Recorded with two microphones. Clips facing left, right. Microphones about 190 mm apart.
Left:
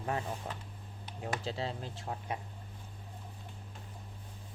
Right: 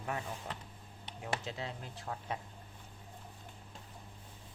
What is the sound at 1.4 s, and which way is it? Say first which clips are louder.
Speech: left 5 dB; 30° left (ahead or behind).